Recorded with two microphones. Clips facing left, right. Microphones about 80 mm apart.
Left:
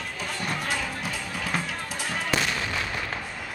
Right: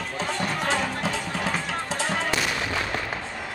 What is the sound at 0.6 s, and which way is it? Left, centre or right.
Music, right.